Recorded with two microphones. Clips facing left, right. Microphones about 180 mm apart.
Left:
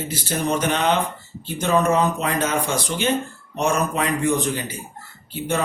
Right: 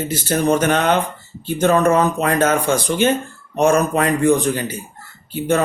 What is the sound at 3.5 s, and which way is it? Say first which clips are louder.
Speech: right 6 dB; 50° right (ahead or behind).